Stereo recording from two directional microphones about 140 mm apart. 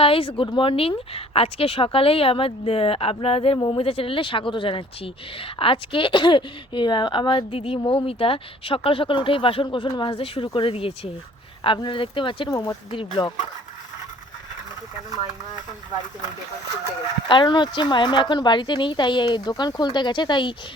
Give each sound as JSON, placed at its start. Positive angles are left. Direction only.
{"t": 0.0, "sound": "speech", "side_deg": 40}
{"t": 12.5, "sound": "speech", "side_deg": 25}
{"t": 12.9, "sound": "speech", "side_deg": 35}
{"t": 17.2, "sound": "speech", "side_deg": 35}